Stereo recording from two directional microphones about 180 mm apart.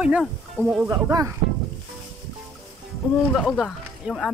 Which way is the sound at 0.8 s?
20° right (ahead or behind).